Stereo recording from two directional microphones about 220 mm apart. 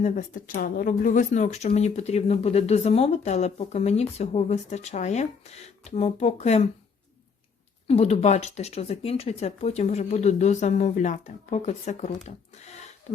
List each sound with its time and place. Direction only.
0.0 s speech: 35° left (ahead or behind)
7.9 s speech: 30° left (ahead or behind)
13.1 s a sound: 30° left (ahead or behind)